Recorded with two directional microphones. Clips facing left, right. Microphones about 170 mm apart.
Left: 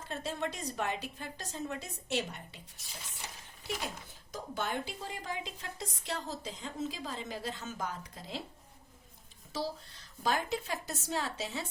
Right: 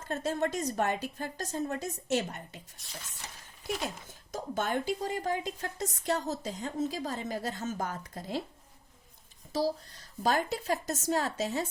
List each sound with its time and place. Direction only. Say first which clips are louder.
0.1 s a woman's voice: right 6 dB; 45° right (ahead or behind)
2.8 s speech: right 3 dB; centre (ahead or behind)
4.3 s a woman's voice: right 5 dB; 45° right (ahead or behind)
9.5 s a woman's voice: right 7 dB; 40° right (ahead or behind)